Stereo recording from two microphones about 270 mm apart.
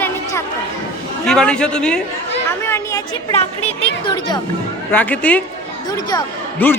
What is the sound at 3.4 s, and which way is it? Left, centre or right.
A man's voice, left.